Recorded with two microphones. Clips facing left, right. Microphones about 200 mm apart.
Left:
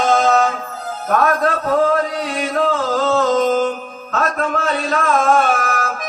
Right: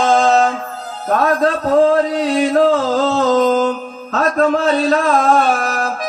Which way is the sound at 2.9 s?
35° right (ahead or behind).